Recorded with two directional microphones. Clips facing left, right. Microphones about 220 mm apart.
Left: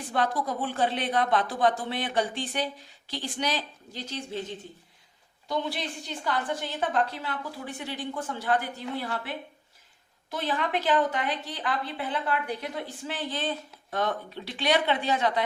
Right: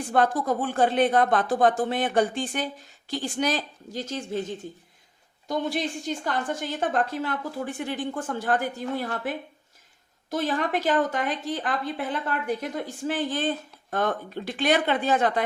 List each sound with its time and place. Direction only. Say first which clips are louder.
0.0 s a woman's voice: right 5 dB; 50° right (ahead or behind)
5.5 s a woman's voice: right 4 dB; 45° right (ahead or behind)